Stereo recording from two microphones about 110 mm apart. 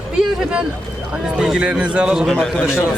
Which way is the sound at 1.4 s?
5° right (ahead or behind).